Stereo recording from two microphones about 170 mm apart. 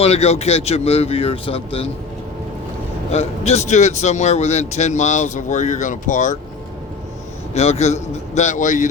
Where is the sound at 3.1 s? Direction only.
40° left (ahead or behind).